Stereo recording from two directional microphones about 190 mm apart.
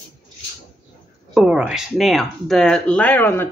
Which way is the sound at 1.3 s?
5° right (ahead or behind).